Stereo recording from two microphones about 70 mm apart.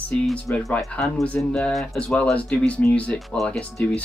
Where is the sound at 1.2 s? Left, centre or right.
Centre.